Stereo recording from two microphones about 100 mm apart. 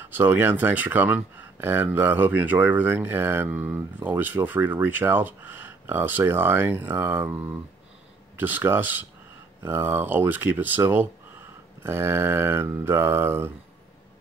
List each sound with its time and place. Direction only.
0.0 s speech: 20° right (ahead or behind)